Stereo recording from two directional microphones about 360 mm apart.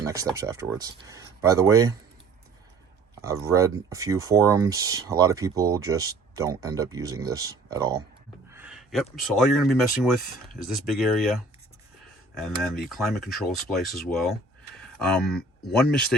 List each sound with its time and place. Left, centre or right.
0.0 s speech: centre
3.2 s speech: centre